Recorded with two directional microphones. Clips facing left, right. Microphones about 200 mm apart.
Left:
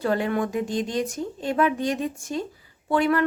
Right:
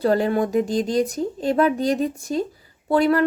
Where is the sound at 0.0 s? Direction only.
35° right (ahead or behind).